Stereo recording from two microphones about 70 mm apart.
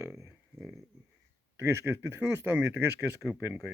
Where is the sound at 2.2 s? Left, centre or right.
Centre.